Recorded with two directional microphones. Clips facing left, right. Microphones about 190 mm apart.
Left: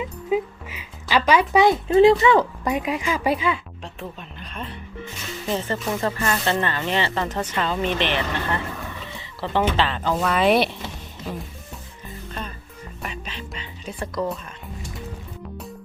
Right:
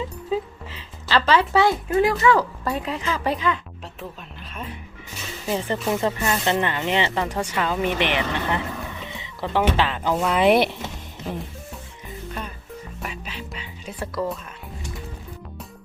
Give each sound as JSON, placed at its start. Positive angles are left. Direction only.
{"t": 0.0, "sound": "speech", "side_deg": 10}
{"t": 4.4, "sound": "music", "side_deg": -5}
{"t": 5.5, "sound": "speech", "side_deg": -15}
{"t": 12.3, "sound": "music", "side_deg": -10}